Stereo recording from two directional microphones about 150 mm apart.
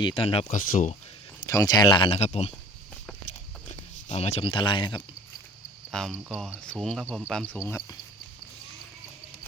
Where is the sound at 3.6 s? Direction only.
50° left (ahead or behind); by 5.0 s 30° left (ahead or behind).